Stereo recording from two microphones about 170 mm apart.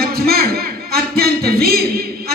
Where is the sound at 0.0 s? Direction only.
65° right (ahead or behind).